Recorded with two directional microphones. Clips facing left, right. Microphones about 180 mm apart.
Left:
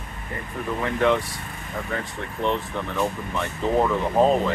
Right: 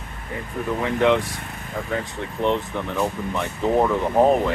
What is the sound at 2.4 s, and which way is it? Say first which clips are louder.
Speech: right 3 dB; 15° right (ahead or behind).